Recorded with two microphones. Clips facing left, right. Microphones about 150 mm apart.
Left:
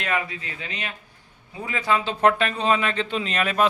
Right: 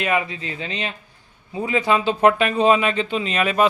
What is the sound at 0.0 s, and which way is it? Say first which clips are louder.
Speech: right 5 dB; 15° right (ahead or behind).